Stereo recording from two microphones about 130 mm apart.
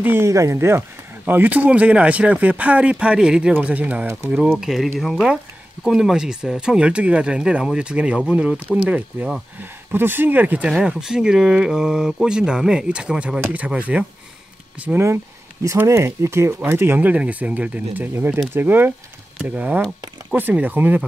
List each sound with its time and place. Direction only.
0.0 s speech: 20° right (ahead or behind)
4.6 s speech: 5° right (ahead or behind)
15.6 s speech: 20° right (ahead or behind)